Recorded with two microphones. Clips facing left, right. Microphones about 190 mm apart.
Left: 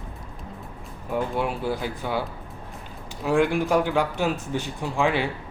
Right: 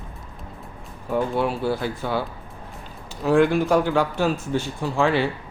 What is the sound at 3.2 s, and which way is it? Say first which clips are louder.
Speech: right 4 dB; 10° left (ahead or behind).